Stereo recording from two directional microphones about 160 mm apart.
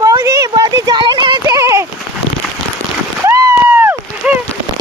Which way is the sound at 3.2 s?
15° right (ahead or behind).